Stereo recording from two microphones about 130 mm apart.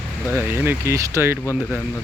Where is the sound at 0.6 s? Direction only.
20° right (ahead or behind).